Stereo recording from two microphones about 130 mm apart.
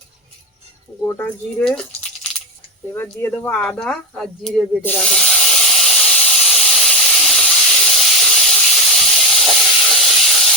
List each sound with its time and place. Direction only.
1.0 s speech: 15° left (ahead or behind)
2.9 s speech: 20° left (ahead or behind)
3.5 s speech: 10° left (ahead or behind)
4.8 s speech: 15° left (ahead or behind)
5.0 s hiss: 5° left (ahead or behind)
6.1 s steam: 5° left (ahead or behind)